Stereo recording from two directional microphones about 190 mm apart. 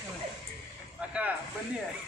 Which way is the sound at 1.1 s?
5° right (ahead or behind).